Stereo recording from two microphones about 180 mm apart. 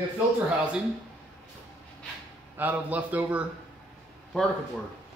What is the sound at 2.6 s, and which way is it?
Speech, 10° right (ahead or behind).